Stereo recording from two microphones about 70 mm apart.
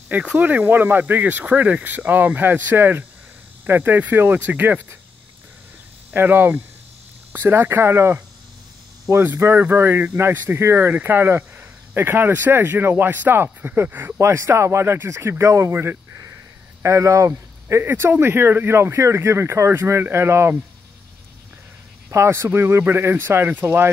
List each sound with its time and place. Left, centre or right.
0.1 s speech: centre
6.1 s speech: right
14.1 s speech: right
16.8 s speech: right
22.1 s speech: right